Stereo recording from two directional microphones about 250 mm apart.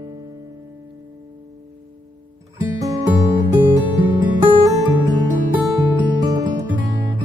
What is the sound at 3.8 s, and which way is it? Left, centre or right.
Music, centre.